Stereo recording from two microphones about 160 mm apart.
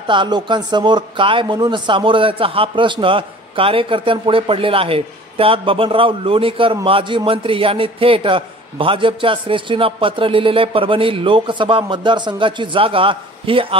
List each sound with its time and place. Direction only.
0.0 s speech: 30° right (ahead or behind)